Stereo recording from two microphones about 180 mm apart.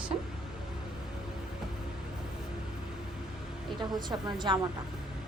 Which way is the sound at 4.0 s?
25° right (ahead or behind).